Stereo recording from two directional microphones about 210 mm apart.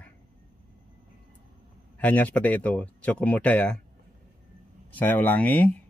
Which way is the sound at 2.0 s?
5° left (ahead or behind).